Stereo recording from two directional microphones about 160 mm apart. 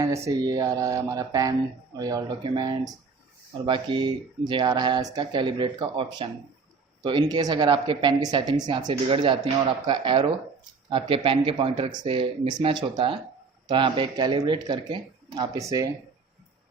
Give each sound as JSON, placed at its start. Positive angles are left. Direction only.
{"t": 0.4, "sound": "speech", "side_deg": -25}